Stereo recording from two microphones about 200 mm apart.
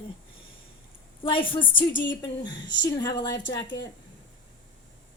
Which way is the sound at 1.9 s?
65° left (ahead or behind).